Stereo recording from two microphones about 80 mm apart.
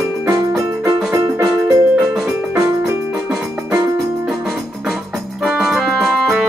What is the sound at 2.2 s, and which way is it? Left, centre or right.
Music, right.